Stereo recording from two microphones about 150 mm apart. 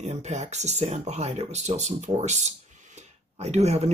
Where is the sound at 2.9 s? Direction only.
45° right (ahead or behind).